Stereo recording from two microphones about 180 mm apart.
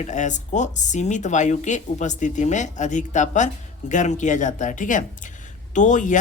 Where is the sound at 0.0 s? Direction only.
45° left (ahead or behind).